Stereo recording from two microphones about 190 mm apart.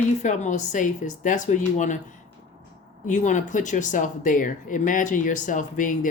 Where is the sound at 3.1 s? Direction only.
40° left (ahead or behind).